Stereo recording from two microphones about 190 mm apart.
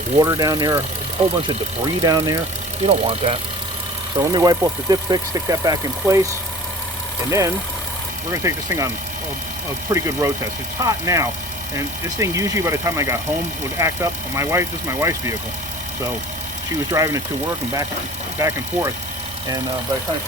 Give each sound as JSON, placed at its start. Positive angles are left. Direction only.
{"t": 0.2, "sound": "speech", "side_deg": -20}
{"t": 2.0, "sound": "speech", "side_deg": -20}
{"t": 2.8, "sound": "speech", "side_deg": -30}
{"t": 4.2, "sound": "speech", "side_deg": -20}
{"t": 7.3, "sound": "speech", "side_deg": -15}
{"t": 9.9, "sound": "speech", "side_deg": -15}
{"t": 16.9, "sound": "speech", "side_deg": -15}
{"t": 18.3, "sound": "speech", "side_deg": -15}